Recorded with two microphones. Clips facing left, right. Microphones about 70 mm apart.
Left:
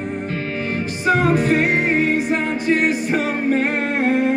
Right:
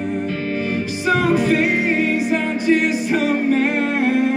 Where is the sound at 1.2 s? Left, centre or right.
Left.